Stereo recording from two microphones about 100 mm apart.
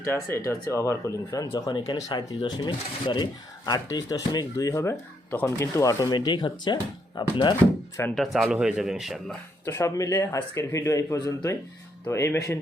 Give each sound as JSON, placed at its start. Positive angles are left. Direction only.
{"t": 0.0, "sound": "speech", "side_deg": 25}
{"t": 3.7, "sound": "speech", "side_deg": 40}
{"t": 8.1, "sound": "speech", "side_deg": 0}
{"t": 9.6, "sound": "speech", "side_deg": 30}